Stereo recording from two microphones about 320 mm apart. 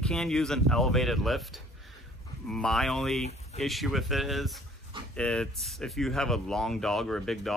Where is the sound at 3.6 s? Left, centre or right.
Centre.